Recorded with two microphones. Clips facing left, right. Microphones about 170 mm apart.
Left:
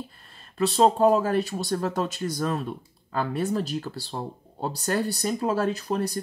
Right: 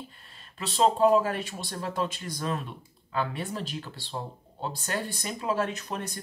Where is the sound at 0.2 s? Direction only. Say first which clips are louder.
Left 15 dB; 40° left (ahead or behind).